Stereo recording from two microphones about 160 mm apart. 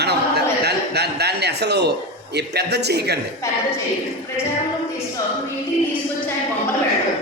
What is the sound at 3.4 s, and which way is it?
Speech, 20° left (ahead or behind).